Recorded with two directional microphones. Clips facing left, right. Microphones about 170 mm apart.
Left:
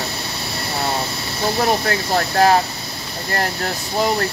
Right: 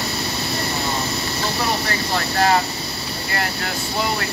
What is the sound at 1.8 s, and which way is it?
Speech, 45° left (ahead or behind).